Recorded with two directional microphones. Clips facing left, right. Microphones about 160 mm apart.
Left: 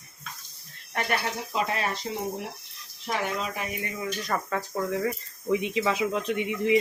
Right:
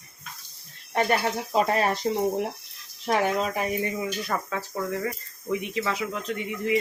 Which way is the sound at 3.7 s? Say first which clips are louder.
Right 7 dB; 35° right (ahead or behind).